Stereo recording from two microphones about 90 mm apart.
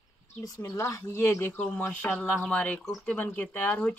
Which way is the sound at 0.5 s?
30° left (ahead or behind).